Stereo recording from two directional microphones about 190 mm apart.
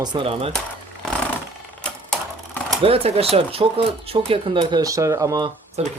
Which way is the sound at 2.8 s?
30° right (ahead or behind).